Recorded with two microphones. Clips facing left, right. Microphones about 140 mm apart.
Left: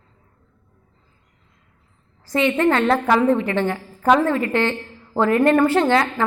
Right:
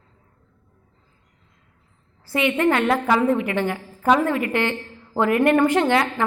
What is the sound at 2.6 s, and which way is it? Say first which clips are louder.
A woman's voice: left 1 dB; 15° right (ahead or behind).